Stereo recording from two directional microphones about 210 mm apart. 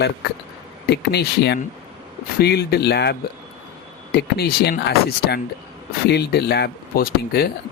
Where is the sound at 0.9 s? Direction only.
50° left (ahead or behind).